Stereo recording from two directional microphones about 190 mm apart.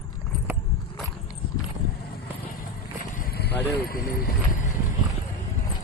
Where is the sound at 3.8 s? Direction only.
50° left (ahead or behind).